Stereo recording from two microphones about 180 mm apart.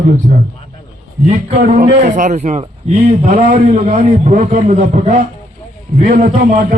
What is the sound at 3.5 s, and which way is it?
A man's voice, 45° right (ahead or behind).